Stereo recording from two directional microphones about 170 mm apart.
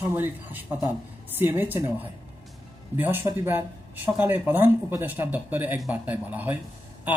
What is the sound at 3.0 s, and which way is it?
A man's voice, 15° right (ahead or behind).